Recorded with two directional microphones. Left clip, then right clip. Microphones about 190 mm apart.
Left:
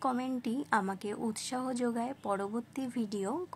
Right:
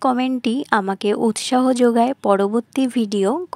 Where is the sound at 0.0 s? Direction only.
45° right (ahead or behind).